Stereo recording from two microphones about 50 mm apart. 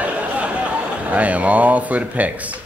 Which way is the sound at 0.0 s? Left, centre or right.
Right.